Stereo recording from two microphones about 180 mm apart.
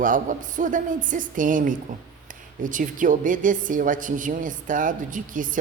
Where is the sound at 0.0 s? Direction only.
45° right (ahead or behind).